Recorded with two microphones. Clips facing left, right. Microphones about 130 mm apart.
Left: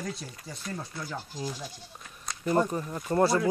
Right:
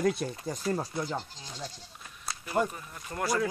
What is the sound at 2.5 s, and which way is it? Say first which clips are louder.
Speech: left 4 dB; 40° left (ahead or behind).